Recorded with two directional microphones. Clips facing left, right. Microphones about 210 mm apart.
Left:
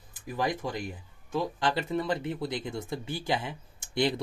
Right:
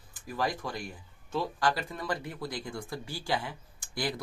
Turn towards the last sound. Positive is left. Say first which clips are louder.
# left 6 dB
turn(degrees=25)  # may be behind; listen again after turning